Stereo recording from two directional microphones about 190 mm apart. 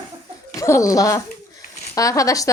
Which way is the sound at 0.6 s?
15° left (ahead or behind).